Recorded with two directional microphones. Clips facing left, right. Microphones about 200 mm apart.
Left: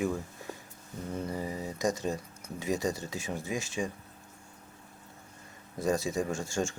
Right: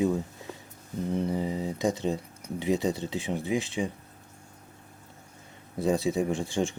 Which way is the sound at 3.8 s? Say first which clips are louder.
Right 3 dB; 10° right (ahead or behind).